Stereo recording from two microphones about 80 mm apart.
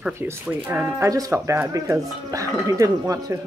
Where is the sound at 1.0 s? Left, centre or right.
Right.